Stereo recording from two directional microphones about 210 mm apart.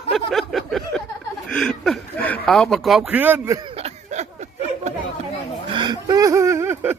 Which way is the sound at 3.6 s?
30° right (ahead or behind).